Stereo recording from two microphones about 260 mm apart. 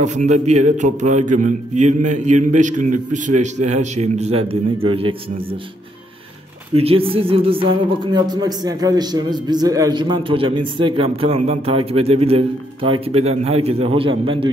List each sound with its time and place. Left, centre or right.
0.0 s speech: right
6.7 s speech: right